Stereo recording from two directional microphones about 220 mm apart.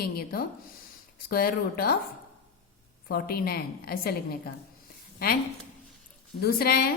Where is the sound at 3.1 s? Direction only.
45° left (ahead or behind).